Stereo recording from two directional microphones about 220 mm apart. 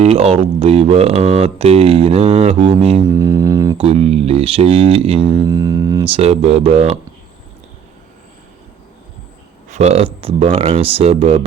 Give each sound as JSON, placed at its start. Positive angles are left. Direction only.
{"t": 0.0, "sound": "speech", "side_deg": -30}
{"t": 3.1, "sound": "speech", "side_deg": -15}
{"t": 9.6, "sound": "speech", "side_deg": -30}